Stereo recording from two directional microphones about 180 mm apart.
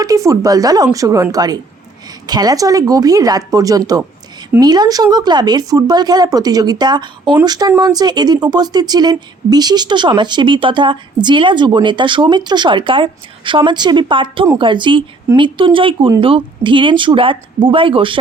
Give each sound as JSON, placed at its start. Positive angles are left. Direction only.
{"t": 0.0, "sound": "speech", "side_deg": -20}